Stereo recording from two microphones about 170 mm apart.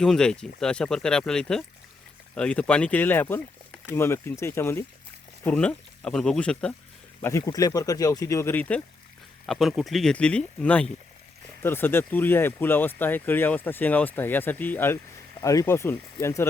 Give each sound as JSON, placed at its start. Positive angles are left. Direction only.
{"t": 0.0, "sound": "speech", "side_deg": 5}
{"t": 7.2, "sound": "speech", "side_deg": 15}
{"t": 9.5, "sound": "speech", "side_deg": 0}